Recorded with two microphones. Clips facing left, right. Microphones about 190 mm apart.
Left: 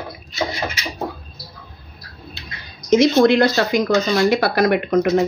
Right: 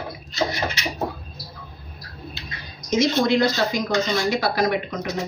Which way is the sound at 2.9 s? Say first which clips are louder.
Left 7 dB; 65° left (ahead or behind).